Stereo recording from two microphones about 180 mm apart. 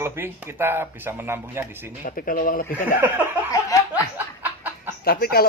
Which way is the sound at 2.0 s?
50° left (ahead or behind).